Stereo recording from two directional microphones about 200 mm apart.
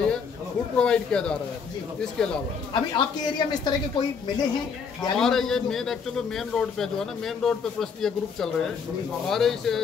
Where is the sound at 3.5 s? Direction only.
20° left (ahead or behind).